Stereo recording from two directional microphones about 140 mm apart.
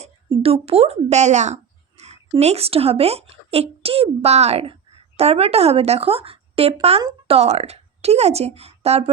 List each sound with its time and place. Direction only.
0.0 s speech: 45° right (ahead or behind)
2.0 s a sound: 50° right (ahead or behind)
2.4 s a woman's voice: 50° right (ahead or behind)